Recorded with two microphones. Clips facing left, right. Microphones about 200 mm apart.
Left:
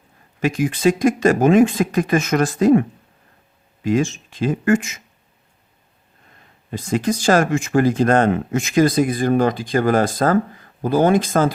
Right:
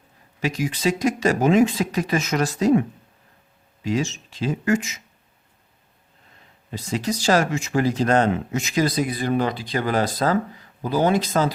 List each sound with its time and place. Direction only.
0.3 s speech: 50° left (ahead or behind)
3.8 s speech: 50° left (ahead or behind)
6.7 s speech: 50° left (ahead or behind)